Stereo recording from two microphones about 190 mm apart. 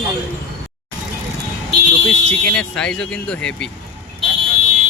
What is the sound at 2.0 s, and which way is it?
Speech, 5° left (ahead or behind).